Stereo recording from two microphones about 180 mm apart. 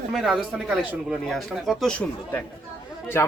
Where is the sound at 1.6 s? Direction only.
5° left (ahead or behind).